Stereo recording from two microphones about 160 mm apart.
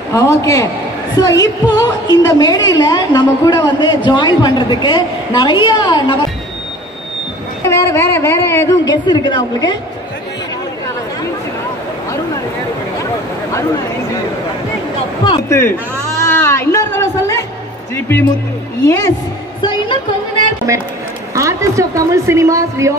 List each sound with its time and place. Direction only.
0.1 s a woman's voice: 20° left (ahead or behind)
7.6 s a woman's voice: 15° left (ahead or behind)
16.2 s music: 15° left (ahead or behind)
17.9 s a woman's voice: 15° left (ahead or behind)
19.6 s music: 30° left (ahead or behind)
21.4 s a woman's voice: 20° right (ahead or behind)